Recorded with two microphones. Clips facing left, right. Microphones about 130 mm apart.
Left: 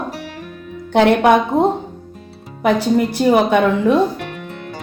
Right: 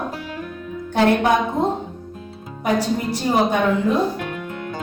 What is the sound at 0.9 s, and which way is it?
Speech, 70° left (ahead or behind).